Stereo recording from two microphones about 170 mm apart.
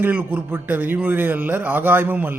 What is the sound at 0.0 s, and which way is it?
Speech, 10° right (ahead or behind).